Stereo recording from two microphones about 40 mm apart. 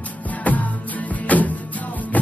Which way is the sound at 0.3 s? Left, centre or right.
Left.